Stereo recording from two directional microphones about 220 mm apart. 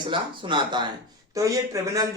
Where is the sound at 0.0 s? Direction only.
20° right (ahead or behind).